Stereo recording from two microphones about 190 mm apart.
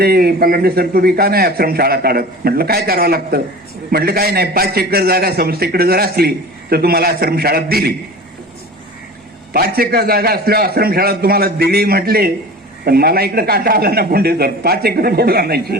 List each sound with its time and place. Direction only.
0.0 s a man's voice: 55° right (ahead or behind)
9.5 s a man's voice: 50° right (ahead or behind)